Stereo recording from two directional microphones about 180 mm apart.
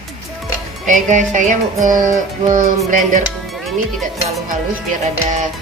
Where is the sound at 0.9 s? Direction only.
45° right (ahead or behind).